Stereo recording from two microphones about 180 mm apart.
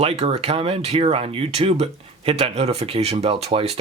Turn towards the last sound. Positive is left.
turn(degrees=-35)  # may be behind; listen again after turning